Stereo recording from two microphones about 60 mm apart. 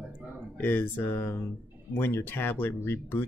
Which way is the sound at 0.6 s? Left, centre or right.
Left.